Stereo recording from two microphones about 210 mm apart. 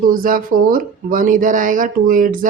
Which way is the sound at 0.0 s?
40° right (ahead or behind).